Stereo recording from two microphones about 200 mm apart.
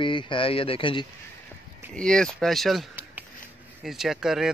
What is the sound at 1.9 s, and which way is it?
A man's voice, 5° left (ahead or behind).